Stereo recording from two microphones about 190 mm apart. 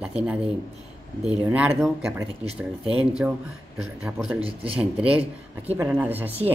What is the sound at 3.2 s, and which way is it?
Speech, 10° right (ahead or behind).